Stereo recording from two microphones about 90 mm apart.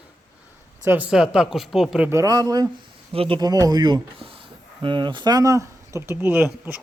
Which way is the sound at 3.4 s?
45° right (ahead or behind).